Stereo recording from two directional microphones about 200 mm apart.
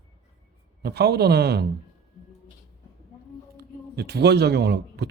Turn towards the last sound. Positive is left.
turn(degrees=-55)  # may be behind; listen again after turning